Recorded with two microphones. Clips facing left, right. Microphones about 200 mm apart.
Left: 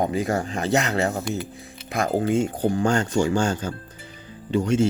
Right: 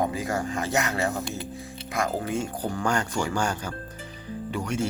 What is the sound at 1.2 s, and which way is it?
Speech, 25° right (ahead or behind).